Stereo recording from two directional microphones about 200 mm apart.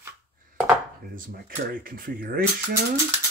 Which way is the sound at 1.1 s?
45° right (ahead or behind).